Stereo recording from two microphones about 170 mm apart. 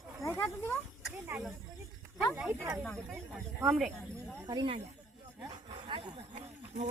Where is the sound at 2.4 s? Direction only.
10° right (ahead or behind).